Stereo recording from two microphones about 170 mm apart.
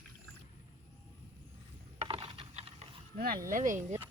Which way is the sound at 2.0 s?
30° right (ahead or behind).